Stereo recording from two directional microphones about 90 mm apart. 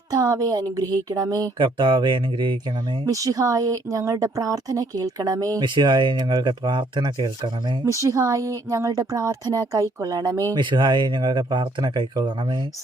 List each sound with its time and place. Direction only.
0.1 s speech: 45° right (ahead or behind)
1.5 s speech: 65° right (ahead or behind)
3.1 s speech: 40° right (ahead or behind)
5.6 s speech: 60° right (ahead or behind)
6.5 s speech: 65° right (ahead or behind)
8.0 s speech: 35° right (ahead or behind)
10.5 s speech: 60° right (ahead or behind)